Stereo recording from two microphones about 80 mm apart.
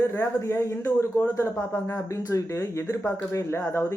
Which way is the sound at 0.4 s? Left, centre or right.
Left.